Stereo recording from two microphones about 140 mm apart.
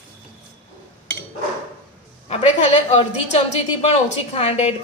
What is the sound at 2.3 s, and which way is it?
A woman's voice, 50° left (ahead or behind).